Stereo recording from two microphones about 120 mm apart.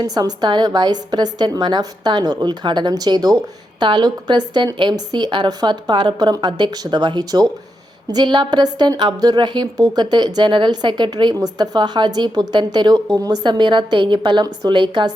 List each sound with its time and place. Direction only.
0.0 s a woman's voice: 35° right (ahead or behind)